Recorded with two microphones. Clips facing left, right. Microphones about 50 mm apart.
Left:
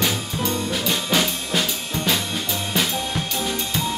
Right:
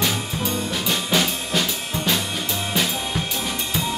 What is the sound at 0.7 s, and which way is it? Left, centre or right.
Drum kit, centre.